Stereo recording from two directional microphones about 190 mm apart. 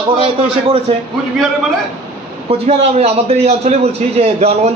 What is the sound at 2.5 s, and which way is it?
Speech, 35° right (ahead or behind).